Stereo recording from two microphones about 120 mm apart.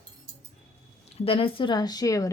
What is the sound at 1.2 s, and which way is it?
A woman's voice, 50° left (ahead or behind).